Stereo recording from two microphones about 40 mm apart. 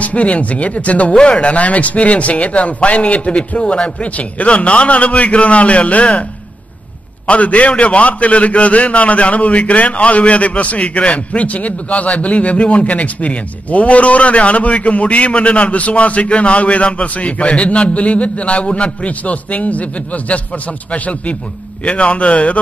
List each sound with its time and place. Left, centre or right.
0.0 s a man's voice: left
1.1 s a man's voice: left
7.2 s a man's voice: left